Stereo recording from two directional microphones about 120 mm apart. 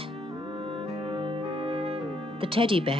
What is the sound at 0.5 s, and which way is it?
Music, 50° right (ahead or behind).